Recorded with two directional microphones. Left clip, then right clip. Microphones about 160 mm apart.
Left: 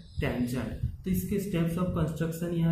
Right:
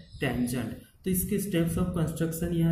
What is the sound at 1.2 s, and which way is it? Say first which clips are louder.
Speech: right 2 dB; 30° right (ahead or behind).